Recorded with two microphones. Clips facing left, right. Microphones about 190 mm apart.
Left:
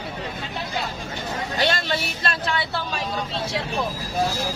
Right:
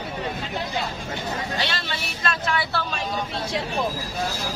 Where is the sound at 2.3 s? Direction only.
30° left (ahead or behind).